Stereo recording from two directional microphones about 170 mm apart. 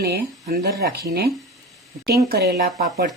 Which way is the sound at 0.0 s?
65° right (ahead or behind).